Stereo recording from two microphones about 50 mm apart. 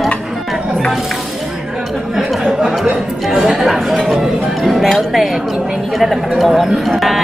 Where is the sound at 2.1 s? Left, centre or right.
Centre.